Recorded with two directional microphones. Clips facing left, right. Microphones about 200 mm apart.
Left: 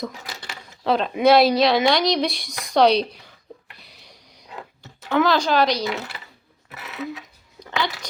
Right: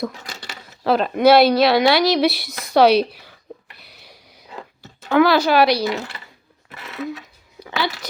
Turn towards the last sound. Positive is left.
turn(degrees=-5)  # may be behind; listen again after turning